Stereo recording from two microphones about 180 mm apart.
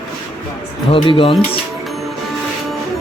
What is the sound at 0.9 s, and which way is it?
Speech, 30° left (ahead or behind).